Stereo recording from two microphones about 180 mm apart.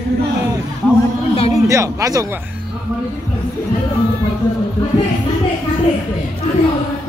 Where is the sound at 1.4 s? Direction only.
40° left (ahead or behind).